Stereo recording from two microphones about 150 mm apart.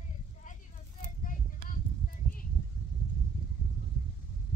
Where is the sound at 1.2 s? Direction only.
70° left (ahead or behind).